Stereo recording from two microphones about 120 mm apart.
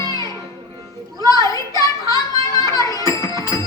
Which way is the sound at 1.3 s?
30° left (ahead or behind).